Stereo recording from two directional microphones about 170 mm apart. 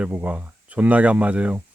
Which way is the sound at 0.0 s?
10° right (ahead or behind).